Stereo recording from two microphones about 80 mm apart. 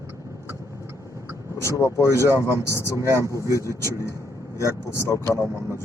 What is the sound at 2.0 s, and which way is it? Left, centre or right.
Speech, left.